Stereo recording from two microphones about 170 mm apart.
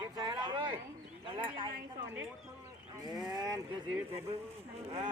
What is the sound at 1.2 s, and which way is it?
Speech, 30° right (ahead or behind).